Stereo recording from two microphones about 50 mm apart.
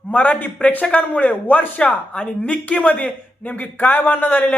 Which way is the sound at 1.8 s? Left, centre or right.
Left.